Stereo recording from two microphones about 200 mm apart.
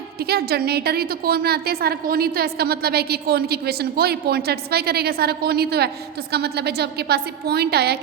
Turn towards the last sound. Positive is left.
turn(degrees=-55)  # may be behind; listen again after turning